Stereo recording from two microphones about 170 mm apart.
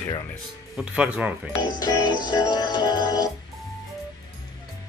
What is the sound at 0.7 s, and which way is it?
Speech, 5° right (ahead or behind).